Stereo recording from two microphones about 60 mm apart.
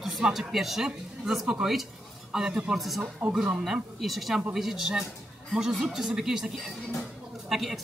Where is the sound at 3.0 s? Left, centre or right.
Centre.